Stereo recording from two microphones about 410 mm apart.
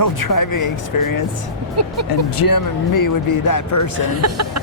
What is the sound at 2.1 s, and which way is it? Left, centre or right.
Speech, left.